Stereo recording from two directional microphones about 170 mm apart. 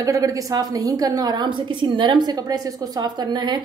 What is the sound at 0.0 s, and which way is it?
A woman's voice, 20° right (ahead or behind).